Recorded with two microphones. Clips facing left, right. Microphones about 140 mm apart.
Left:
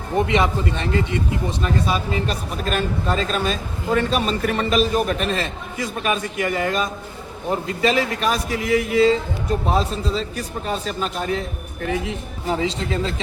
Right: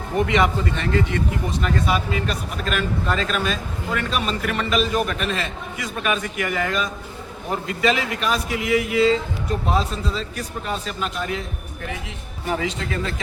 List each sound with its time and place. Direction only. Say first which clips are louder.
0.1 s speech: even; 25° left (ahead or behind)
12.5 s speech: left 2 dB; 30° left (ahead or behind)